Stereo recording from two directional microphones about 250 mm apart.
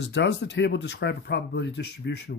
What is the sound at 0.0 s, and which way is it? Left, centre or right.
Speech, left.